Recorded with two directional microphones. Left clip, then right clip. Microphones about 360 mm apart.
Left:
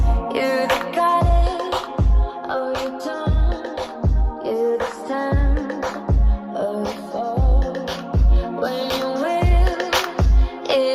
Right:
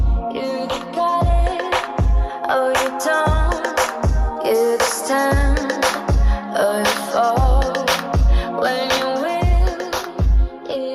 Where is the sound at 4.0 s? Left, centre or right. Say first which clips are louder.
Right 6 dB; right.